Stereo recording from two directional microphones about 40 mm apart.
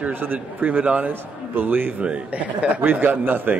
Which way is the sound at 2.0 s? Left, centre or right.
Right.